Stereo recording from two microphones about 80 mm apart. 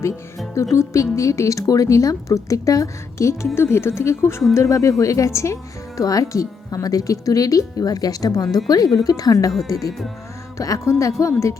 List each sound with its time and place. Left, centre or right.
0.5 s a woman's voice: left